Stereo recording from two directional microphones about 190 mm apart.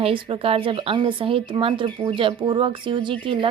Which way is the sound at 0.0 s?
30° right (ahead or behind).